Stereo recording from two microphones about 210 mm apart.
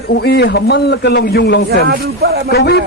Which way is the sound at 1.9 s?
45° right (ahead or behind).